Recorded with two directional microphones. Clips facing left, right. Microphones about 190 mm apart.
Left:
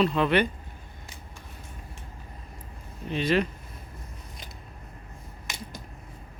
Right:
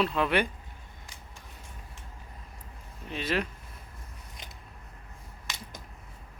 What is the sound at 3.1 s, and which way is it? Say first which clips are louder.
Speech: left 6 dB; centre (ahead or behind).